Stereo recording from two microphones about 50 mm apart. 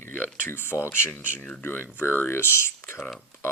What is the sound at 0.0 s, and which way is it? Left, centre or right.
Speech, left.